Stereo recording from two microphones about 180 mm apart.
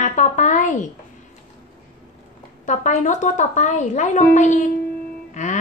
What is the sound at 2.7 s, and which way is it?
A woman's voice, 40° left (ahead or behind).